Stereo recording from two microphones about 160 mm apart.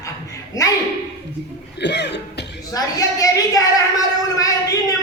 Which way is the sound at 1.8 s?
90° left.